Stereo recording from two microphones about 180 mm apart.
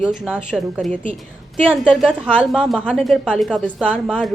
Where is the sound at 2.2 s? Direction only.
5° right (ahead or behind).